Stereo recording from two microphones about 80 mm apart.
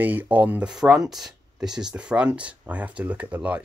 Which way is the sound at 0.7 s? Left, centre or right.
Centre.